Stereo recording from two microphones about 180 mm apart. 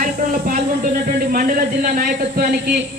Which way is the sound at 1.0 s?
50° right (ahead or behind).